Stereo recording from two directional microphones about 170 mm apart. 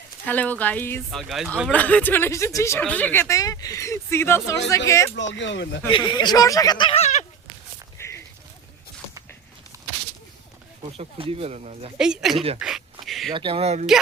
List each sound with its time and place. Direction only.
0.3 s speech: 10° left (ahead or behind)
1.1 s speech: centre (ahead or behind); by 5.1 s 15° left (ahead or behind)
5.1 s speech: 90° left
5.9 s speech: 30° left (ahead or behind)
8.0 s a sound: 15° left (ahead or behind)
9.7 s a sound: 20° right (ahead or behind)
10.9 s speech: 35° right (ahead or behind)
11.9 s speech: 5° right (ahead or behind)
12.5 s a sound: centre (ahead or behind)
13.3 s speech: 30° right (ahead or behind)